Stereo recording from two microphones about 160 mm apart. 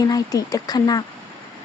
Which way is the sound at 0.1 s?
20° left (ahead or behind).